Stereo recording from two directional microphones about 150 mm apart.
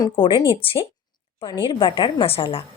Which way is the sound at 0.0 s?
30° left (ahead or behind).